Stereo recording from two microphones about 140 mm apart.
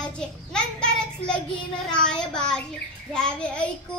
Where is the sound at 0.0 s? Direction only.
5° left (ahead or behind).